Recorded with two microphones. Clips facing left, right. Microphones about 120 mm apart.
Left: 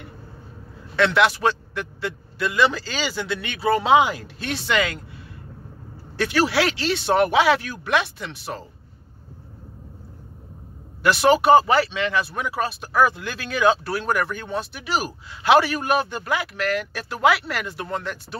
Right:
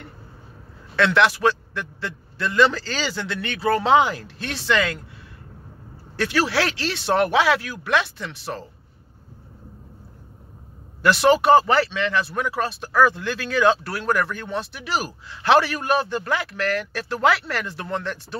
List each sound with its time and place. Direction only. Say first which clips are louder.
0.9 s speech: even; 15° left (ahead or behind)
6.1 s speech: left 1 dB; 15° left (ahead or behind)
11.0 s speech: even; 15° left (ahead or behind)